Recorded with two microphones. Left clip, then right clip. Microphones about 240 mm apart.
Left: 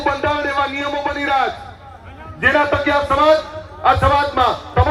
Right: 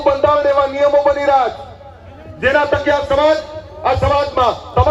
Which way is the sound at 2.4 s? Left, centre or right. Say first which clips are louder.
Right 1 dB; left.